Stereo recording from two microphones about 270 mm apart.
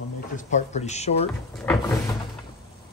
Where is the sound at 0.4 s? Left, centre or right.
Left.